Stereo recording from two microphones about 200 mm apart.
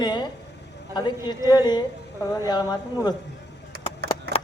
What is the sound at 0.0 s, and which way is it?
Vehicle, 20° left (ahead or behind).